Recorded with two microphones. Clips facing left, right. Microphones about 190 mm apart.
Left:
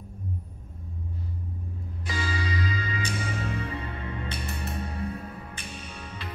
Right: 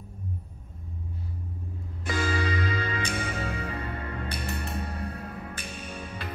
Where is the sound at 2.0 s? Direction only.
55° right (ahead or behind).